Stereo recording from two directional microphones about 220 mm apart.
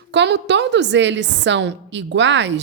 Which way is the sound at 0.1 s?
50° right (ahead or behind).